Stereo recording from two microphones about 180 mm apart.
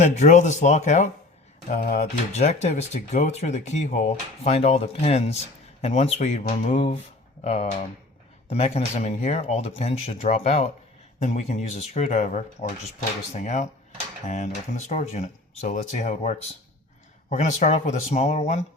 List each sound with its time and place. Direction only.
0.0 s speech: 40° left (ahead or behind)